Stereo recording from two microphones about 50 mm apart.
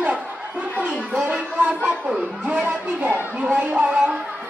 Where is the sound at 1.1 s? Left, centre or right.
Centre.